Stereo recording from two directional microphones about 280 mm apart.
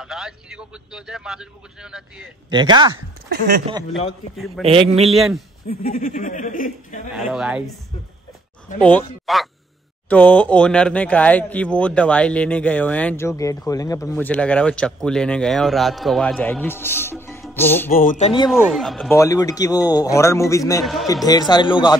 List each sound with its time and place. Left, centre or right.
0.0 s speech: centre
2.5 s speech: centre
3.3 s speech: right
4.6 s a man's voice: right
5.0 s speech: centre
5.7 s speech: left
7.2 s speech: centre
8.7 s speech: centre
17.9 s speech: left
18.5 s speech: centre
19.1 s a man's voice: centre
20.8 s speech: centre
21.3 s a man's voice: centre